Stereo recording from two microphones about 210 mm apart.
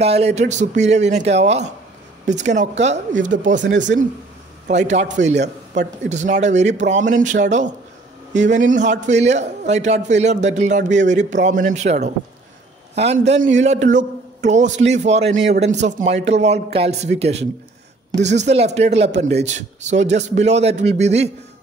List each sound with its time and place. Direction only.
0.0 s a man's voice: 30° right (ahead or behind)
3.6 s speech: 60° right (ahead or behind)
4.6 s a man's voice: 35° right (ahead or behind)